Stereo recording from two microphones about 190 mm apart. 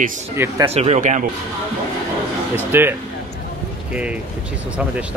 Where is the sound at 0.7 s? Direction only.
35° right (ahead or behind).